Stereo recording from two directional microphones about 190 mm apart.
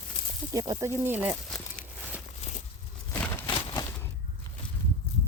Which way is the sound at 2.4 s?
40° left (ahead or behind).